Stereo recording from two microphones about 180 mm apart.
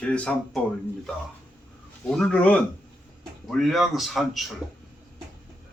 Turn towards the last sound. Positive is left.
turn(degrees=0)  # may be behind; listen again after turning